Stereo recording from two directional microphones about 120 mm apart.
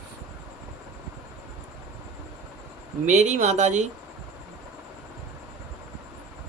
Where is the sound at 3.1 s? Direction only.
80° right.